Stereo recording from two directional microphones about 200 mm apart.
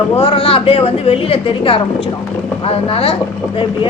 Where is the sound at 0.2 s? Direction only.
30° left (ahead or behind).